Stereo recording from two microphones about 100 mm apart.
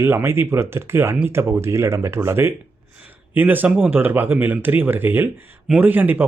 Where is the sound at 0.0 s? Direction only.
25° right (ahead or behind).